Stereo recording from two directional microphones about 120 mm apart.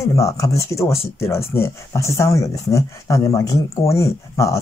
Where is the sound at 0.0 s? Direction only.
25° left (ahead or behind).